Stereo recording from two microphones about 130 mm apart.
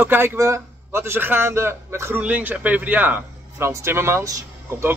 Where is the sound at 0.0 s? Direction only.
15° right (ahead or behind).